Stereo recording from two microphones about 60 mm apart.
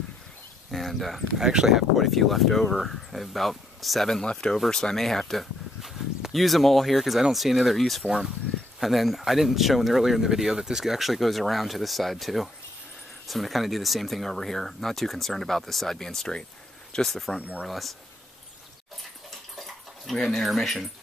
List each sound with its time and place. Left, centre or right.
0.7 s speech: centre
1.5 s speech: centre
17.4 s speech: right
17.6 s speech: centre
19.5 s dog: centre
20.2 s speech: centre